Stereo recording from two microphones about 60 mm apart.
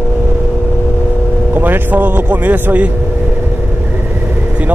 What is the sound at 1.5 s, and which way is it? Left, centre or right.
Speech, right.